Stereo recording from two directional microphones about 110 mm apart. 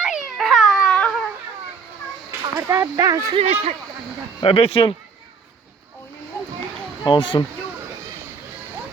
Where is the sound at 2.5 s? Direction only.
25° right (ahead or behind).